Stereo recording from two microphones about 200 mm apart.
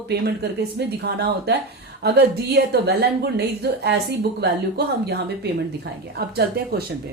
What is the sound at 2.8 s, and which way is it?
A woman's voice, 55° right (ahead or behind).